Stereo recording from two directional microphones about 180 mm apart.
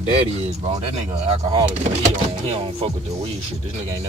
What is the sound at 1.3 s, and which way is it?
Speech, 25° right (ahead or behind).